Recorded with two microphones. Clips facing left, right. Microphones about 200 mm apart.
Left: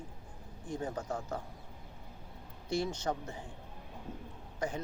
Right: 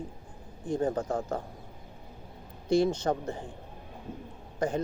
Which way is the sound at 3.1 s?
55° right (ahead or behind).